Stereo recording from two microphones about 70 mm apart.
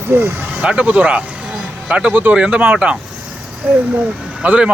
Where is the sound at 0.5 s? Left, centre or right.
Centre.